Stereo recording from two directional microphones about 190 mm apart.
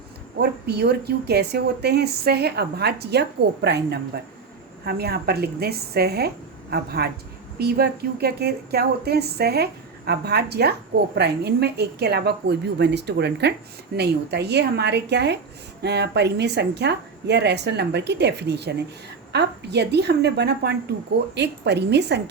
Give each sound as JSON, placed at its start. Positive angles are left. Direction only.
{"t": 0.3, "sound": "speech", "side_deg": -60}